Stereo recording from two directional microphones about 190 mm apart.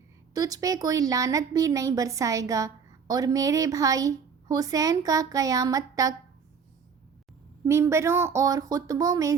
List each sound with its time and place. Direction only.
0.3 s a woman's voice: 20° right (ahead or behind)
7.6 s a woman's voice: 15° right (ahead or behind)